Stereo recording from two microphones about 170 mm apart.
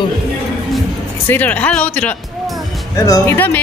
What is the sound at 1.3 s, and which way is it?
Speech, 10° left (ahead or behind).